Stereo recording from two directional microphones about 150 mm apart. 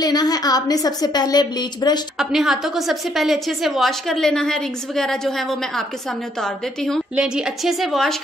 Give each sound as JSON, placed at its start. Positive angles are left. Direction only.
{"t": 0.0, "sound": "a woman's voice", "side_deg": 25}
{"t": 2.1, "sound": "a woman's voice", "side_deg": 0}